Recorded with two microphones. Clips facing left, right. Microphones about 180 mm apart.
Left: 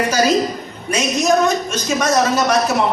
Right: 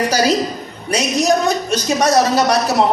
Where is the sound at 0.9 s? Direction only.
35° right (ahead or behind).